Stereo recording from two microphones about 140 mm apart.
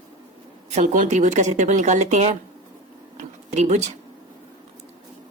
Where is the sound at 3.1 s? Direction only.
55° right (ahead or behind).